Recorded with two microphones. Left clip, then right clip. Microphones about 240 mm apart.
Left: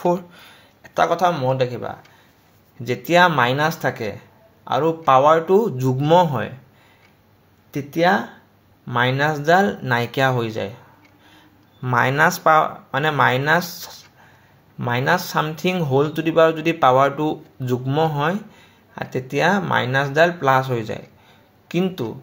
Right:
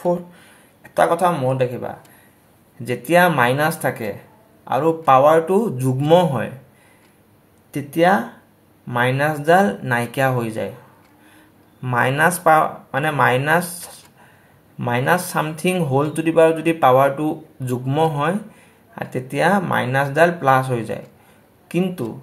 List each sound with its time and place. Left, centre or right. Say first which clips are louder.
0.8 s speech: right 1 dB; left
7.7 s speech: right 2 dB; left
11.8 s speech: even; left